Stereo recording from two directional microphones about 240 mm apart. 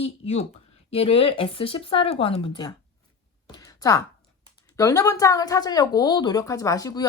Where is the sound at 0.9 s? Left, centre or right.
Left.